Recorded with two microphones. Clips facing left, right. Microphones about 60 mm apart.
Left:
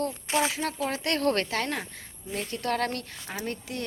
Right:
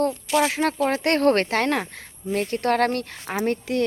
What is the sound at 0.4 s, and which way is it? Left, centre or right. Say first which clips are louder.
Speech: right 7 dB; right.